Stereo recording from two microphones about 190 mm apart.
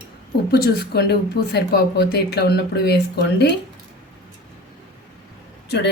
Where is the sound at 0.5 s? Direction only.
55° left (ahead or behind).